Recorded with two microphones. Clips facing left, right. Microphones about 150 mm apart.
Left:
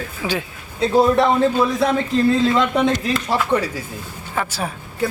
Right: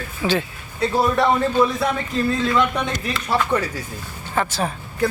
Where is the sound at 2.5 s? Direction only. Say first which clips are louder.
Left 3 dB; 25° left (ahead or behind).